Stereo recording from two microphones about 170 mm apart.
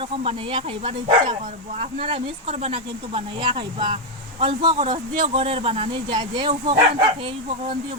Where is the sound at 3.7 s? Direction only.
40° right (ahead or behind).